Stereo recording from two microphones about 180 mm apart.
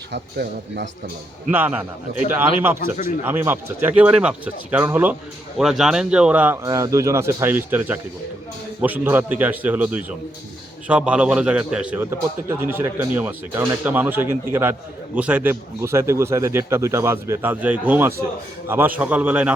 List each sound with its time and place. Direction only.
0.1 s a man's voice: 70° right (ahead or behind)
1.5 s speech: 10° right (ahead or behind)
3.2 s speech: 10° right (ahead or behind)
6.7 s speech: 20° right (ahead or behind)